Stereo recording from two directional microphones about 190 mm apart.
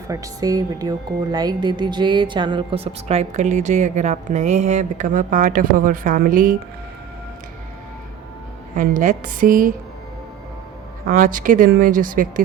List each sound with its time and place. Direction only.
0.1 s speech: 20° right (ahead or behind); by 6.6 s 45° right (ahead or behind)
8.7 s speech: 40° right (ahead or behind)
11.0 s speech: 45° right (ahead or behind)